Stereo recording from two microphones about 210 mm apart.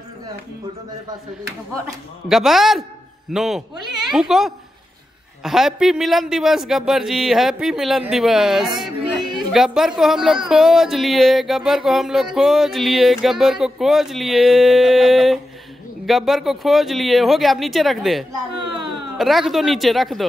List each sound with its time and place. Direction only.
2.2 s speech: centre (ahead or behind)